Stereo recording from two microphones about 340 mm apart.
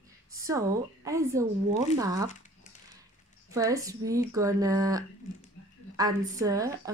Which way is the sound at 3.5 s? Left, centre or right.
Centre.